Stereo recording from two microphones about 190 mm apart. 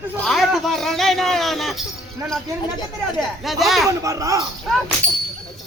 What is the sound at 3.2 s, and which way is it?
Speech, centre (ahead or behind).